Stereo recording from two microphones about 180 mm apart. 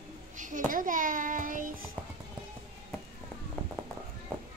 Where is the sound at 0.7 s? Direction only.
50° right (ahead or behind).